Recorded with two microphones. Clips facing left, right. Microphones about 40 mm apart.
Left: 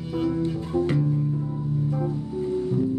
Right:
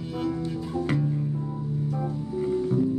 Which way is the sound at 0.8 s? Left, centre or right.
Centre.